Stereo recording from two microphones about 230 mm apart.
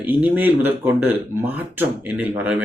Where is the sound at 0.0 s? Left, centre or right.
Centre.